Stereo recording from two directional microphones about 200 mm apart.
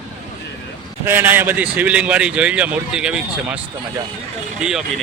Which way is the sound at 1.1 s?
10° right (ahead or behind).